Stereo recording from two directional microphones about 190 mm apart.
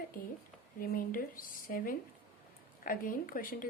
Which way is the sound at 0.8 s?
50° left (ahead or behind).